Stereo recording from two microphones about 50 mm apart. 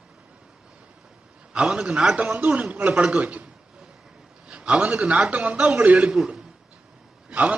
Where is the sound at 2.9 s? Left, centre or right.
Centre.